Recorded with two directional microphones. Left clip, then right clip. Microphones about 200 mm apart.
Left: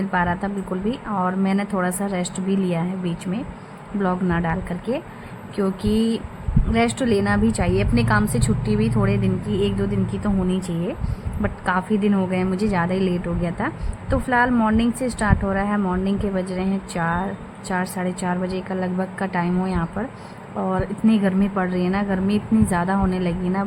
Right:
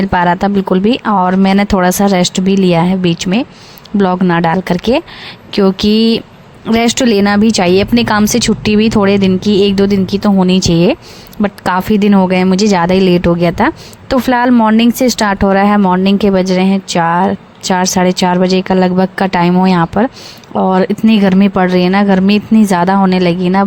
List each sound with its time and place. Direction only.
0.1 s speech: 50° right (ahead or behind)